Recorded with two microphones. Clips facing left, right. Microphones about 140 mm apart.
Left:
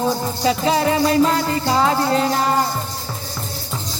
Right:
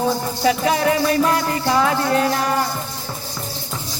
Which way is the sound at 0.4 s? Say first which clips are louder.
Even; 30° left (ahead or behind).